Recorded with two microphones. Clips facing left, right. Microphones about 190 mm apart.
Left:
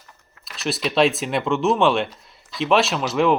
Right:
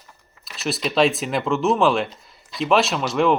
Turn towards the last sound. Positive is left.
turn(degrees=0)  # may be behind; listen again after turning